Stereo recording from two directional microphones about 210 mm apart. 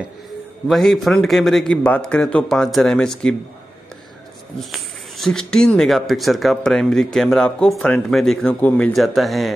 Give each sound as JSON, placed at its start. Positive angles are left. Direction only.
{"t": 0.7, "sound": "speech", "side_deg": 0}
{"t": 4.6, "sound": "speech", "side_deg": 0}